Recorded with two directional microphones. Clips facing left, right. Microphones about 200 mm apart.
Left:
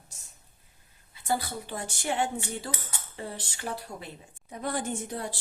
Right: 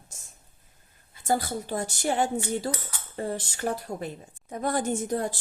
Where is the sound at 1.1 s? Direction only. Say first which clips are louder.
Right 4 dB; 45° right (ahead or behind).